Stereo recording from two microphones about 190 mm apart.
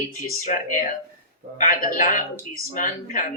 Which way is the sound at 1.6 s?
45° left (ahead or behind).